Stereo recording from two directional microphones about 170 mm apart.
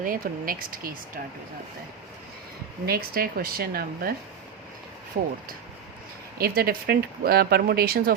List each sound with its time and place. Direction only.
0.0 s speech: 55° right (ahead or behind)
2.8 s speech: 60° right (ahead or behind)
5.2 s speech: 55° right (ahead or behind)
6.4 s speech: 60° right (ahead or behind)